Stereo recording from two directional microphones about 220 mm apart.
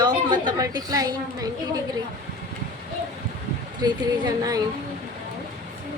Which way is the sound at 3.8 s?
15° right (ahead or behind).